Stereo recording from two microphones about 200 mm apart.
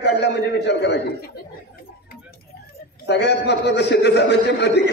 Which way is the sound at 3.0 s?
55° left (ahead or behind).